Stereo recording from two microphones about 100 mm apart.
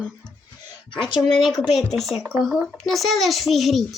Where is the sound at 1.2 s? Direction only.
Centre (ahead or behind).